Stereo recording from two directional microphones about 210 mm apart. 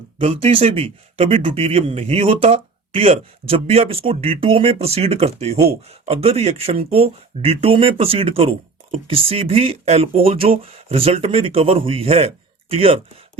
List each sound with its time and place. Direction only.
0.2 s speech: 25° right (ahead or behind)